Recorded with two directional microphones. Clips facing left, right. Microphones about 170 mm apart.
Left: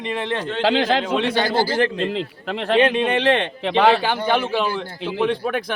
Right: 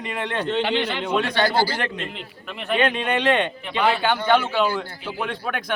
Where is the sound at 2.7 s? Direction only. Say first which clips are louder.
Left 4 dB; 90° left.